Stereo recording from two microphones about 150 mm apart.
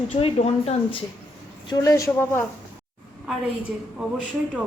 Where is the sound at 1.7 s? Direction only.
25° left (ahead or behind).